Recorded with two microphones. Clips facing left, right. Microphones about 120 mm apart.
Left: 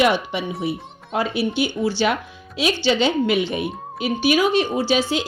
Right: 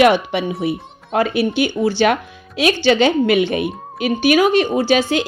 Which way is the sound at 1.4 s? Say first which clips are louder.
Right 4 dB; 60° right (ahead or behind).